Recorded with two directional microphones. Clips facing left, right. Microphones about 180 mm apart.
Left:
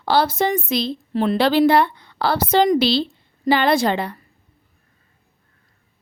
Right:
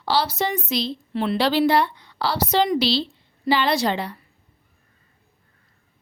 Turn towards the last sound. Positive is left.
turn(degrees=55)  # may be behind; listen again after turning